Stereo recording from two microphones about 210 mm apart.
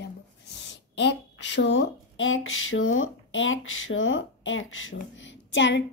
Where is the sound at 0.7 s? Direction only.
55° left (ahead or behind).